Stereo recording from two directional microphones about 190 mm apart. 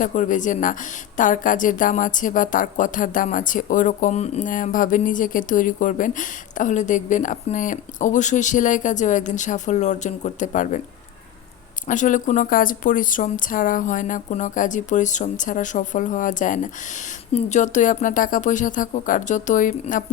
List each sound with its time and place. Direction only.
0.0 s a woman's voice: 40° left (ahead or behind)
11.9 s a woman's voice: 40° left (ahead or behind)